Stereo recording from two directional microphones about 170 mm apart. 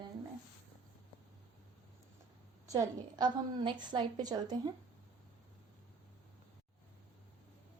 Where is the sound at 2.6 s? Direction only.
25° right (ahead or behind).